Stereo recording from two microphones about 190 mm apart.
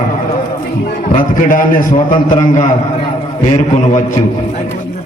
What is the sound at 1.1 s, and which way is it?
A man's voice, 45° left (ahead or behind).